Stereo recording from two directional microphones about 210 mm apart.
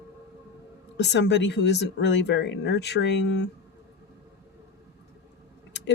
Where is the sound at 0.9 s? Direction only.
55° left (ahead or behind).